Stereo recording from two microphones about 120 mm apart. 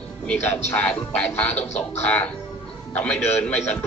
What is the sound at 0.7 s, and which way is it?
Speech, 15° left (ahead or behind).